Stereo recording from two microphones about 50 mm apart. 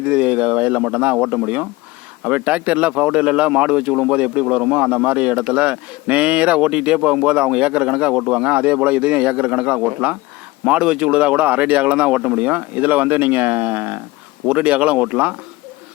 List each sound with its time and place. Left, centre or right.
0.0 s a man's voice: right
11.2 s speech: right
14.4 s a man's voice: right